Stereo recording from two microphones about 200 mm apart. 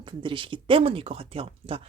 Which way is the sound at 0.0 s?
25° right (ahead or behind).